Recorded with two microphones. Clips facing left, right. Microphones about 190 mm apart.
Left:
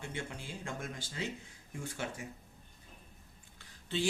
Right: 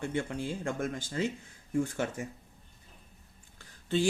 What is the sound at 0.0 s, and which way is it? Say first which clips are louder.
A man's voice: right 9 dB; 55° right (ahead or behind).